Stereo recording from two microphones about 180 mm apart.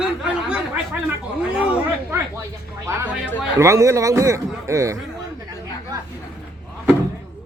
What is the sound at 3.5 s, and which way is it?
A man's voice, 15° right (ahead or behind).